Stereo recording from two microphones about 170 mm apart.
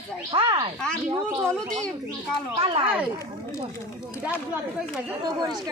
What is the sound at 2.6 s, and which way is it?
Speech, 30° right (ahead or behind).